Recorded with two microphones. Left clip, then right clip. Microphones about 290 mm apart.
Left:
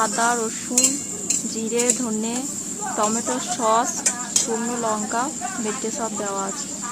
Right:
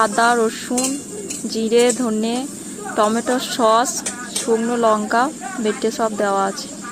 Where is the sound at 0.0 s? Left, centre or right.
Centre.